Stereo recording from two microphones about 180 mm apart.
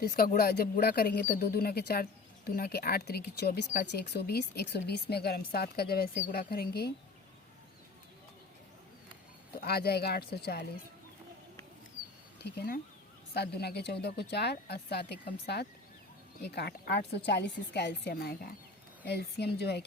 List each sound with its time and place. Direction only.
0.0 s speech: 55° left (ahead or behind)
3.7 s speech: 50° left (ahead or behind)
4.0 s speech: 65° left (ahead or behind)
9.6 s speech: 60° left (ahead or behind)
12.4 s a woman's voice: 65° left (ahead or behind)